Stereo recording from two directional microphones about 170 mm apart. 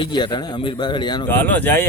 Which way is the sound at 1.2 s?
10° left (ahead or behind).